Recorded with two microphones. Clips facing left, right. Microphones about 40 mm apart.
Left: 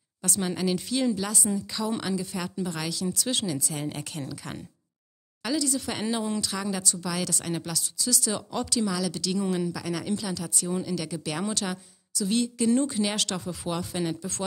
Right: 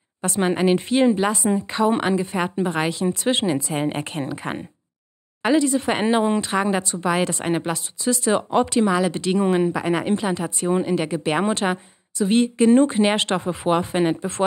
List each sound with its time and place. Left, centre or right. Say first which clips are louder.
0.2 s speech: right 9 dB; right